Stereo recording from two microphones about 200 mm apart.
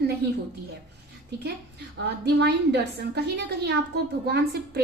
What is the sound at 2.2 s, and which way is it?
A woman's voice, 55° right (ahead or behind).